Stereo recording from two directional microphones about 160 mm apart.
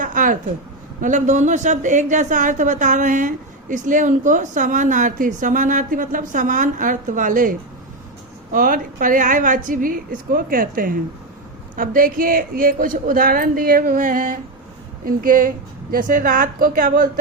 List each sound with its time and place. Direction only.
0.0 s a sound: 55° right (ahead or behind)
1.0 s a woman's voice: 50° right (ahead or behind)
8.5 s a woman's voice: 60° right (ahead or behind)